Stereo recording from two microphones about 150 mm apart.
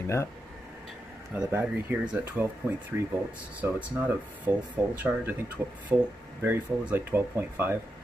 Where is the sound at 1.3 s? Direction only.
10° right (ahead or behind).